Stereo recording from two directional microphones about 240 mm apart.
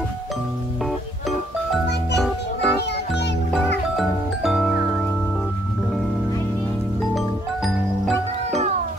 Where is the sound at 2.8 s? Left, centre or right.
Left.